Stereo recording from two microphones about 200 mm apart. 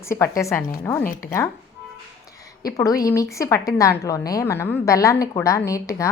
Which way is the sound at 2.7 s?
15° left (ahead or behind).